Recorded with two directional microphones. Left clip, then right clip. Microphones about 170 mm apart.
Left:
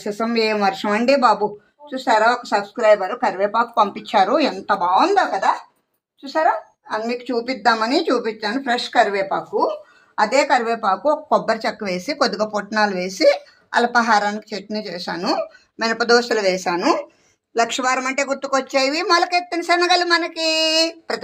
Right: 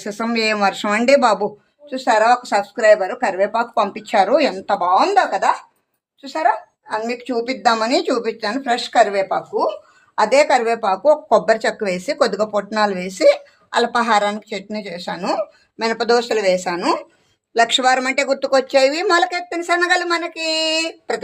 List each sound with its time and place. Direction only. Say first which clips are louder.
0.0 s speech: even; 30° right (ahead or behind)
10.2 s speech: right 3 dB; 30° right (ahead or behind)
19.4 s speech: even; 10° right (ahead or behind)